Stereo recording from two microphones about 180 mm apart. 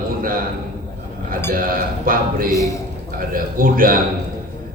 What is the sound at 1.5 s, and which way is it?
A man's voice, 50° right (ahead or behind).